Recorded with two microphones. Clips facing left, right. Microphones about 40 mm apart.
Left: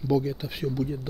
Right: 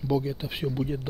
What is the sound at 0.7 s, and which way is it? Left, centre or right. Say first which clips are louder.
Speech: even; right.